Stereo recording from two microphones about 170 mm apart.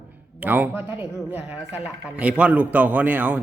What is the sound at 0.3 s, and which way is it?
Speech, 10° right (ahead or behind).